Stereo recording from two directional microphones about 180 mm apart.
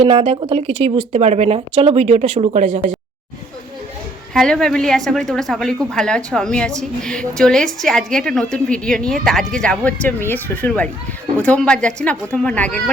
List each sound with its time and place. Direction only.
0.0 s speech: 35° right (ahead or behind)
4.4 s a woman's voice: 5° left (ahead or behind)